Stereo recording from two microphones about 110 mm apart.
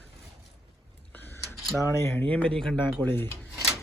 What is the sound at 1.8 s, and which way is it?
Speech, 25° left (ahead or behind).